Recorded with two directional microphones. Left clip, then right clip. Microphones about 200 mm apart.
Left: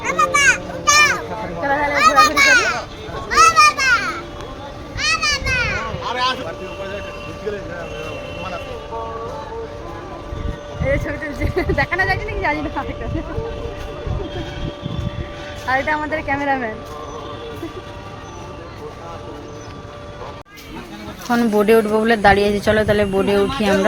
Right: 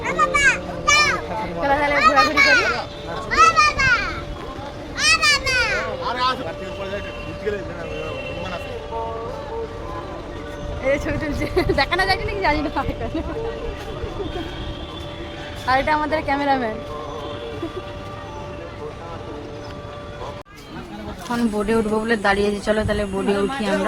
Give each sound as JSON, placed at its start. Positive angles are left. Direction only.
{"t": 0.0, "sound": "children playing", "side_deg": 50}
{"t": 1.6, "sound": "children playing", "side_deg": 0}
{"t": 2.0, "sound": "children playing", "side_deg": 60}
{"t": 4.9, "sound": "children playing", "side_deg": -50}
{"t": 5.5, "sound": "a sound", "side_deg": -30}
{"t": 6.1, "sound": "vehicle", "side_deg": 15}
{"t": 10.8, "sound": "music", "side_deg": -5}
{"t": 11.5, "sound": "a sound", "side_deg": -10}
{"t": 15.6, "sound": "a woman's voice", "side_deg": -10}
{"t": 21.2, "sound": "speech", "side_deg": 20}